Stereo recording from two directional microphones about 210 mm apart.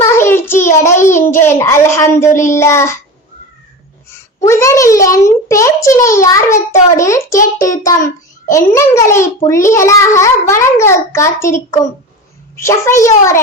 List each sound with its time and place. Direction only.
0.0 s child singing: 10° left (ahead or behind)
1.3 s a child's voice: 10° left (ahead or behind)
4.4 s a child's voice: 15° left (ahead or behind)